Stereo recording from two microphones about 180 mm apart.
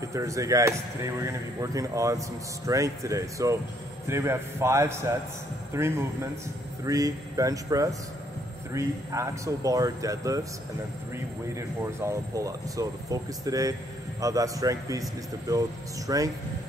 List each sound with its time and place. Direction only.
0.1 s speech: 15° right (ahead or behind)
16.1 s speech: 20° right (ahead or behind)